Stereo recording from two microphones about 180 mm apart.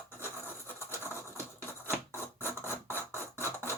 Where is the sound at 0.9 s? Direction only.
15° left (ahead or behind).